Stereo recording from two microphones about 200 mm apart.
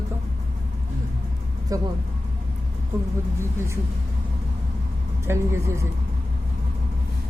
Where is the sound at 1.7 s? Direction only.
15° right (ahead or behind).